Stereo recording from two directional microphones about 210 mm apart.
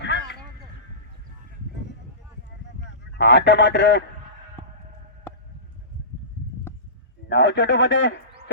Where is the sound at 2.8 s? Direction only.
55° left (ahead or behind).